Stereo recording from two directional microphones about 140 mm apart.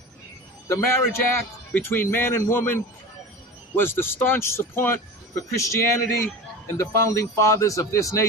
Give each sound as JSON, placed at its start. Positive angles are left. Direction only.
{"t": 0.7, "sound": "speech", "side_deg": 20}